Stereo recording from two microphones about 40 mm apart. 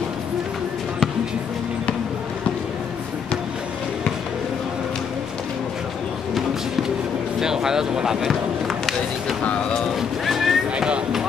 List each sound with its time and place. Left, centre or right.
7.3 s speech: centre
8.3 s run: centre
9.4 s speech: left
9.9 s music: centre